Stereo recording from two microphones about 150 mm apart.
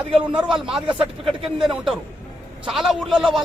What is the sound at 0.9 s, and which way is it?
Speech, 35° right (ahead or behind).